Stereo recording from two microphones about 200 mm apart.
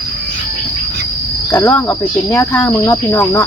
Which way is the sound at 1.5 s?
10° left (ahead or behind).